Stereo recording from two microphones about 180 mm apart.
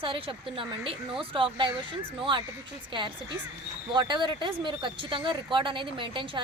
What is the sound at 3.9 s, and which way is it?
Speech, 25° right (ahead or behind).